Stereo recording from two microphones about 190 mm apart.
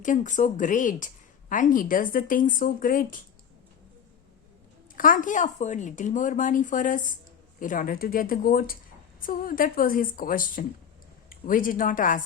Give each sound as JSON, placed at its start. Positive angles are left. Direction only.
{"t": 0.0, "sound": "a woman's voice", "side_deg": 40}
{"t": 4.9, "sound": "a woman's voice", "side_deg": 45}